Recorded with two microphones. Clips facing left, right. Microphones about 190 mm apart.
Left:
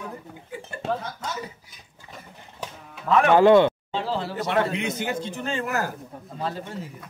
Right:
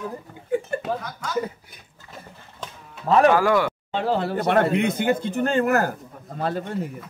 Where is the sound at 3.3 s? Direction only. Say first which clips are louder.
Left 5 dB; 25° left (ahead or behind).